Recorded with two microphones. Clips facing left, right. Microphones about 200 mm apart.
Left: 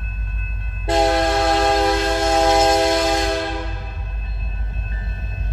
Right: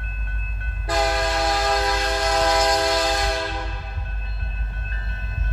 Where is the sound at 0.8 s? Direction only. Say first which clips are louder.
Left 6 dB; 25° left (ahead or behind).